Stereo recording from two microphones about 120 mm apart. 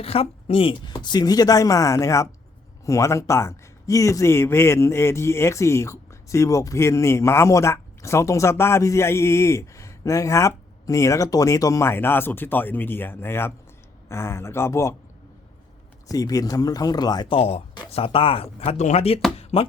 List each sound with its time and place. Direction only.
0.0 s a woman's voice: 55° left (ahead or behind); by 14.9 s 25° left (ahead or behind)
16.0 s a woman's voice: 30° left (ahead or behind)
17.3 s speech: 55° left (ahead or behind)
19.4 s music: 55° left (ahead or behind)